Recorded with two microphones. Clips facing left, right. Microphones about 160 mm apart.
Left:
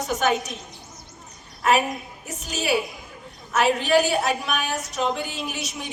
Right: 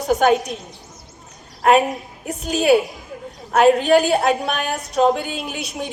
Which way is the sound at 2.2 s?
55° right (ahead or behind).